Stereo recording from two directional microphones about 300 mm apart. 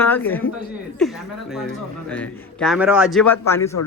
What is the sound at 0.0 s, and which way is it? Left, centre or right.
A man's voice, centre.